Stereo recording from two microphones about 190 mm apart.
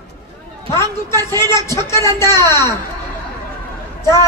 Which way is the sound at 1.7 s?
15° left (ahead or behind).